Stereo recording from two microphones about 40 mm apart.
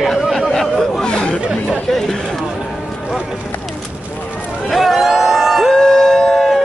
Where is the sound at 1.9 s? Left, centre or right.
Centre.